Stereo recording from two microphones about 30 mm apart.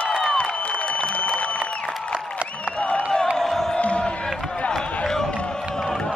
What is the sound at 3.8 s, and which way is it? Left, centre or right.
Crowd, left.